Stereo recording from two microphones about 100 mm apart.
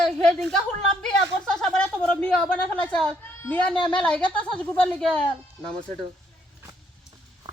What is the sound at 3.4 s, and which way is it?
A woman's voice, 15° left (ahead or behind).